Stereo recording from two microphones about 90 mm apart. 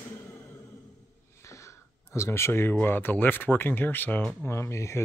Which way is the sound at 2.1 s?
30° left (ahead or behind).